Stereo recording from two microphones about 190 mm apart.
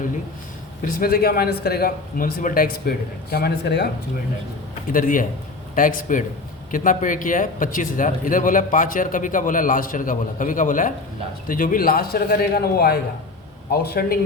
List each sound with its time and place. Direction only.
0.8 s speech: 50° left (ahead or behind)
4.9 s speech: 45° left (ahead or behind)
14.0 s speech: 50° left (ahead or behind)